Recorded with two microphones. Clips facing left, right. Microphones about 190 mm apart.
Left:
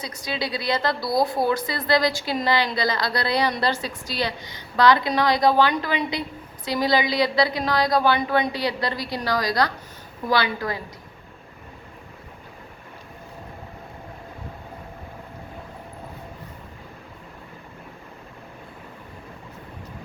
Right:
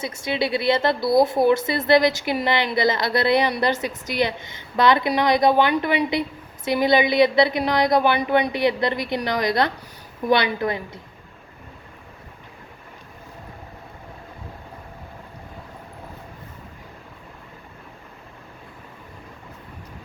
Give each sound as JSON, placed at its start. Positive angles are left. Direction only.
{"t": 0.0, "sound": "a woman's voice", "side_deg": -25}